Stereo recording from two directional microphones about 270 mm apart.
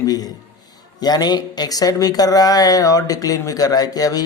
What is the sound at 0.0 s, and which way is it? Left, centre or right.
A man's voice, centre.